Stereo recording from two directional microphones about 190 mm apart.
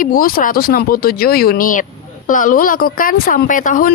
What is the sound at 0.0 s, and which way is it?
Speech, 45° left (ahead or behind).